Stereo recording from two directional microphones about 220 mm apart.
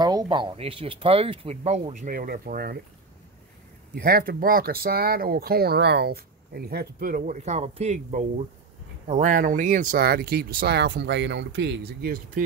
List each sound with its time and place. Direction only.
0.0 s speech: 20° right (ahead or behind); by 2.8 s 45° right (ahead or behind)
3.9 s speech: 40° right (ahead or behind)